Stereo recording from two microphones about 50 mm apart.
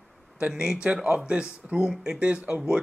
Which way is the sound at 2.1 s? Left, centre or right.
Right.